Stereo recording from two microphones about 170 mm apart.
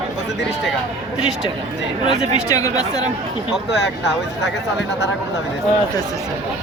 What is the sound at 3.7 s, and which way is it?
Speech, 90° left.